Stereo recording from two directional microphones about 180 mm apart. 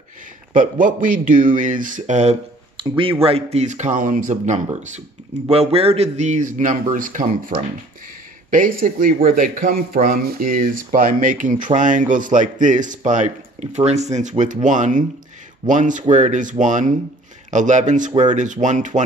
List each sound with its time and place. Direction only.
0.6 s a man's voice: 45° right (ahead or behind)
2.8 s speech: 30° right (ahead or behind); by 4.6 s 45° right (ahead or behind)
5.5 s a man's voice: 35° right (ahead or behind)